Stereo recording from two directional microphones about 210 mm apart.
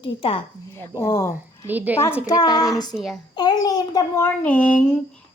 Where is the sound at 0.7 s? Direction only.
10° left (ahead or behind).